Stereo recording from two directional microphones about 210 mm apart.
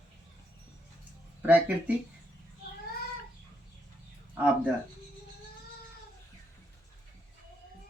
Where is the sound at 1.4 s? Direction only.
10° right (ahead or behind).